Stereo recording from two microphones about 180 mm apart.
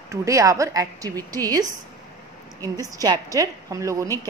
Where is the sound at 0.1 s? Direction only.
15° right (ahead or behind).